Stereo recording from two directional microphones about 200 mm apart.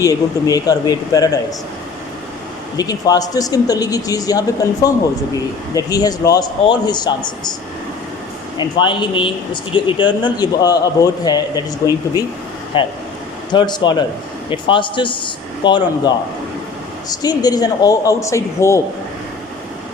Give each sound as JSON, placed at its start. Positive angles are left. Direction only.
{"t": 0.0, "sound": "speech", "side_deg": 20}
{"t": 2.7, "sound": "speech", "side_deg": 20}
{"t": 8.5, "sound": "speech", "side_deg": 25}